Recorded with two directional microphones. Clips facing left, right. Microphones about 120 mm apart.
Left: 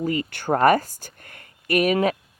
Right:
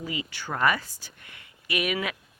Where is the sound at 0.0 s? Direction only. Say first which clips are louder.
Left 9 dB; 45° left (ahead or behind).